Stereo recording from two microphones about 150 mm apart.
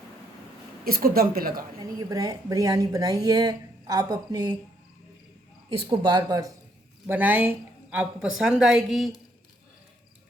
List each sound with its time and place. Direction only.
0.9 s speech: 80° right
1.8 s a woman's voice: 25° right (ahead or behind)
5.7 s a woman's voice: 35° right (ahead or behind)
7.1 s speech: 10° right (ahead or behind)